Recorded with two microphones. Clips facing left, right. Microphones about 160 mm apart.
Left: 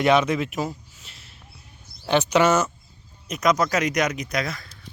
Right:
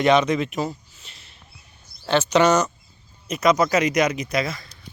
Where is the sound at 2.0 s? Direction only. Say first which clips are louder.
Right 1 dB; 15° left (ahead or behind).